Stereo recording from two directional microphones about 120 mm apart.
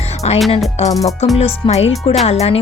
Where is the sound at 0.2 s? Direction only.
60° left (ahead or behind).